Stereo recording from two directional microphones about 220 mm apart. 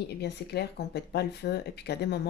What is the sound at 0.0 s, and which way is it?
Speech, 50° left (ahead or behind).